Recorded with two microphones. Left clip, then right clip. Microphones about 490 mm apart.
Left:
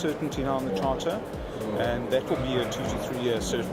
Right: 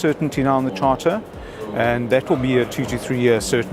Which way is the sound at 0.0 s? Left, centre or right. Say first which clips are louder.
Right 9 dB; right.